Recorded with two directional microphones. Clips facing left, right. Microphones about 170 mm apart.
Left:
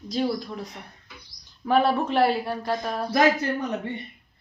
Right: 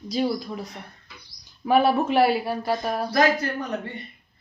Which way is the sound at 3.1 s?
20° left (ahead or behind).